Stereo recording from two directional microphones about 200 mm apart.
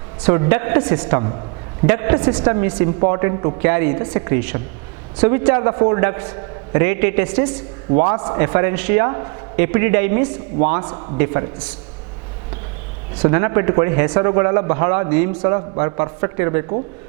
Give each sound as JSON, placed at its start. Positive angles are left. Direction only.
{"t": 0.3, "sound": "a man's voice", "side_deg": -15}
{"t": 1.0, "sound": "a man's voice", "side_deg": -20}
{"t": 7.9, "sound": "a man's voice", "side_deg": -20}
{"t": 10.8, "sound": "speech", "side_deg": -25}
{"t": 11.2, "sound": "a man's voice", "side_deg": -15}
{"t": 13.2, "sound": "a man's voice", "side_deg": -15}
{"t": 15.4, "sound": "speech", "side_deg": -25}